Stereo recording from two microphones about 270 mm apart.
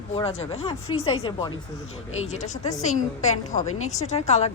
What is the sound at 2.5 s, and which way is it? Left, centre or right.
Speech, centre.